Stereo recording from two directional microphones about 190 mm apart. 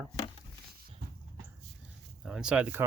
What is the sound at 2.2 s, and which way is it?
Speech, 5° right (ahead or behind).